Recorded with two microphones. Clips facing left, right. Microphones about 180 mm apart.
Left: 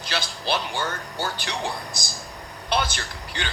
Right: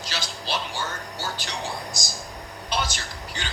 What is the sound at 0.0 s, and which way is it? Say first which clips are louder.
Music: left 4 dB; 55° left (ahead or behind).